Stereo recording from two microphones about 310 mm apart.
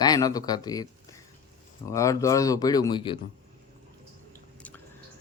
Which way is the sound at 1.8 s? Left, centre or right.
Centre.